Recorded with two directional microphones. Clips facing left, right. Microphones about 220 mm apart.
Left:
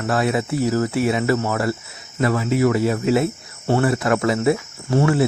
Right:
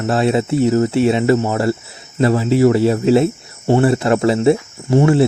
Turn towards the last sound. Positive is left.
turn(degrees=-25)  # may be behind; listen again after turning